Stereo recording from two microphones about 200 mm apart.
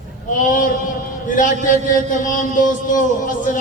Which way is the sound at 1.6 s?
40° left (ahead or behind).